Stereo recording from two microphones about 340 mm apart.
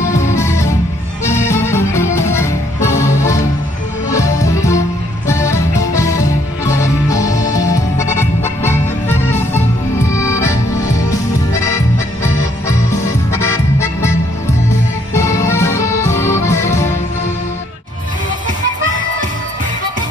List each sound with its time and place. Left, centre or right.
0.4 s music: centre
15.1 s music: centre